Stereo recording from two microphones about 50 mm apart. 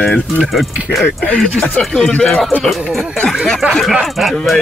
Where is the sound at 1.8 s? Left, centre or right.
Centre.